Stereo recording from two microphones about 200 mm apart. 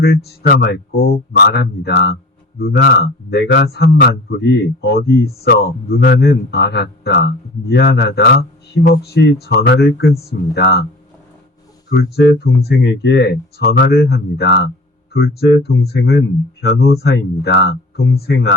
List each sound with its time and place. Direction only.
0.0 s a man's voice: 55° left (ahead or behind)
11.9 s a man's voice: 55° left (ahead or behind)